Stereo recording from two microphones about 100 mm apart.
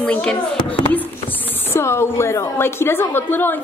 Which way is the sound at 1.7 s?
25° left (ahead or behind).